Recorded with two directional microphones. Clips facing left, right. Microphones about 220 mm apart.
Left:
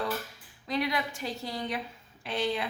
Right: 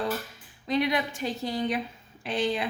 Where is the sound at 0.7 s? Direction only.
20° right (ahead or behind).